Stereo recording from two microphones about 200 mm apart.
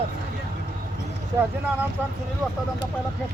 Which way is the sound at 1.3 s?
15° right (ahead or behind).